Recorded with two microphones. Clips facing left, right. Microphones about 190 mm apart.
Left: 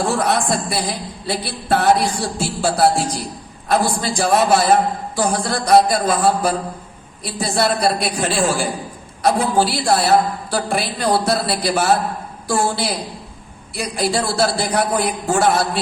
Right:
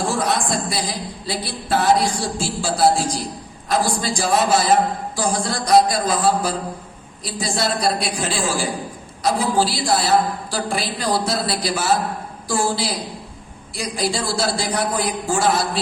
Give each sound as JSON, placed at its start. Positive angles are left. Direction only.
{"t": 0.1, "sound": "a man's voice", "side_deg": 60}